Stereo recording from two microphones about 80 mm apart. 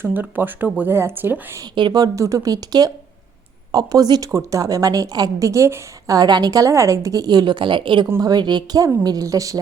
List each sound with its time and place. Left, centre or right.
0.0 s speech: right
1.9 s a woman's voice: right
4.3 s a woman's voice: right
6.1 s a woman's voice: right
8.2 s a woman's voice: right
9.0 s a woman's voice: right